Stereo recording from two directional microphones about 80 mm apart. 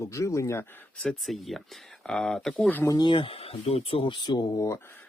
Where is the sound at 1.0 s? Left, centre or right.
Centre.